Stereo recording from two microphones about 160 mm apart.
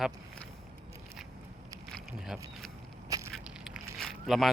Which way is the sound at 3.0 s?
20° right (ahead or behind).